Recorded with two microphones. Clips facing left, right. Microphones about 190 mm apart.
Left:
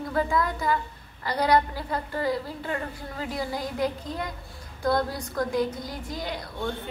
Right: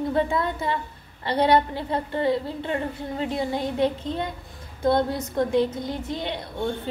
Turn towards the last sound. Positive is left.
turn(degrees=-25)  # may be behind; listen again after turning